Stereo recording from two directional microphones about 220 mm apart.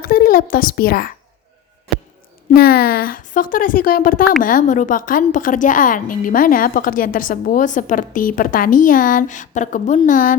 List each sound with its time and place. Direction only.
0.0 s a woman's voice: 40° left (ahead or behind)
2.5 s a woman's voice: 45° left (ahead or behind)